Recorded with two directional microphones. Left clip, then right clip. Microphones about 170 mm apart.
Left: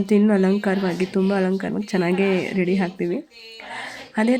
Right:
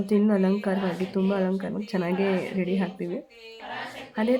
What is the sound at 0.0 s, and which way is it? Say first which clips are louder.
Speech: left 5 dB; 20° left (ahead or behind).